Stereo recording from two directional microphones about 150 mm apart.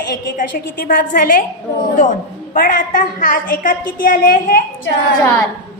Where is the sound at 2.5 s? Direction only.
60° left (ahead or behind).